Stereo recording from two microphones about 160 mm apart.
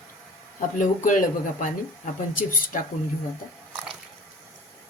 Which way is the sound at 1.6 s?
55° left (ahead or behind).